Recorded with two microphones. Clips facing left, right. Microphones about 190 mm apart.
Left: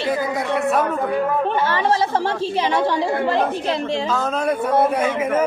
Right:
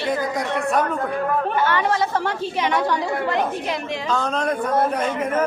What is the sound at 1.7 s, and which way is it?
A woman's voice, 30° left (ahead or behind).